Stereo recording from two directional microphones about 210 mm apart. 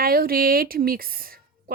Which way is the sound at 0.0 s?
45° right (ahead or behind).